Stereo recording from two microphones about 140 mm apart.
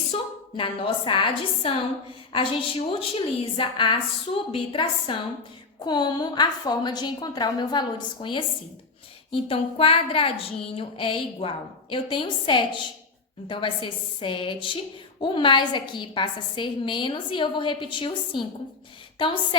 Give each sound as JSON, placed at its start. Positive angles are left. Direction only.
{"t": 0.1, "sound": "a woman's voice", "side_deg": 40}